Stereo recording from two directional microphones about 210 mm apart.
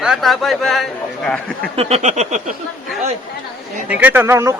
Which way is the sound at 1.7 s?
30° right (ahead or behind).